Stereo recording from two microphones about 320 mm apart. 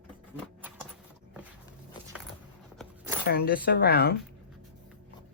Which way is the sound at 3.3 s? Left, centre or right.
Left.